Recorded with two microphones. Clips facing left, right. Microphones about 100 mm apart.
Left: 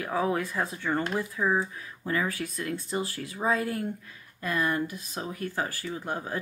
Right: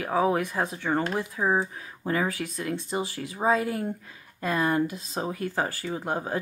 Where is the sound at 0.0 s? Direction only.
20° right (ahead or behind).